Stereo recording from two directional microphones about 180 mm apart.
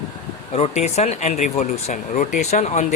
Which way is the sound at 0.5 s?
35° left (ahead or behind).